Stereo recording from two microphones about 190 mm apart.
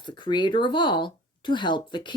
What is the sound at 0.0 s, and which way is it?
Speech, 25° left (ahead or behind).